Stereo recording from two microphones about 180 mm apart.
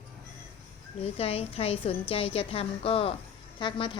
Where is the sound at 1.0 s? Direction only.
35° left (ahead or behind).